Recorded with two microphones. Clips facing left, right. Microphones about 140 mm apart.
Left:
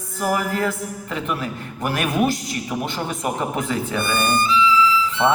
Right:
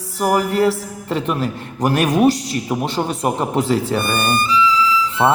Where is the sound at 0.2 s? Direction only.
35° right (ahead or behind).